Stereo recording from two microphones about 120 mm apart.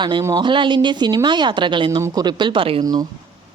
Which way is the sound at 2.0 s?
30° right (ahead or behind).